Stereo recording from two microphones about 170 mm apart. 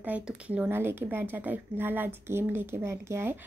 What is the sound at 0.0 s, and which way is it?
Speech, 10° right (ahead or behind).